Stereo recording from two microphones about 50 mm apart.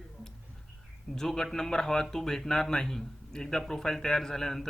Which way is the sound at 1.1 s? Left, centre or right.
Centre.